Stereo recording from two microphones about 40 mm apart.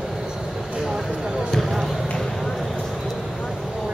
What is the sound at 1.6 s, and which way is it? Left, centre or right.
Basketball bounce, centre.